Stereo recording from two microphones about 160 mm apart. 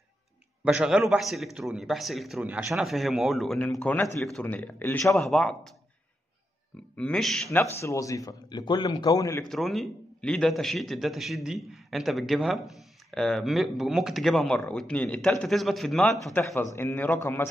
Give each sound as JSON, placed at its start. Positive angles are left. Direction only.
{"t": 0.7, "sound": "a man's voice", "side_deg": -5}
{"t": 5.1, "sound": "a man's voice", "side_deg": 0}
{"t": 7.0, "sound": "a man's voice", "side_deg": 5}
{"t": 7.8, "sound": "a man's voice", "side_deg": 20}
{"t": 9.4, "sound": "a man's voice", "side_deg": 0}
{"t": 16.5, "sound": "speech", "side_deg": 15}